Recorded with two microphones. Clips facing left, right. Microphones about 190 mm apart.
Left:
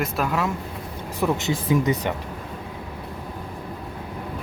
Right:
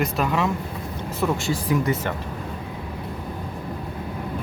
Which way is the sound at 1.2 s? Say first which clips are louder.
Left 1 dB; 20° left (ahead or behind).